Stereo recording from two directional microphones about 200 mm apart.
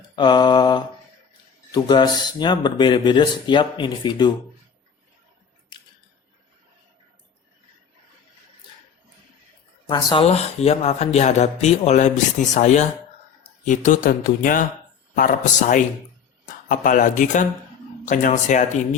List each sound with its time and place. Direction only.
0.2 s speech: 20° left (ahead or behind)
5.7 s scissors: 25° left (ahead or behind)
9.8 s speech: 25° left (ahead or behind); by 18.6 s 40° left (ahead or behind)